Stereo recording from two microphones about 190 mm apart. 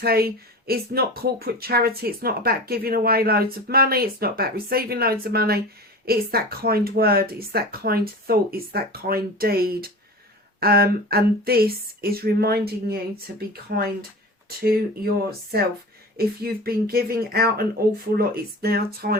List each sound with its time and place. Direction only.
0.0 s speech: 55° right (ahead or behind)